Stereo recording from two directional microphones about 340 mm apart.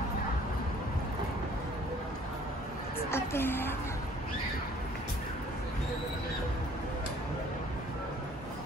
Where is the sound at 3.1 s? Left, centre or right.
Centre.